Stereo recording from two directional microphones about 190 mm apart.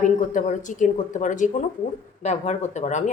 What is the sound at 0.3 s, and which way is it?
A woman's voice, 40° left (ahead or behind).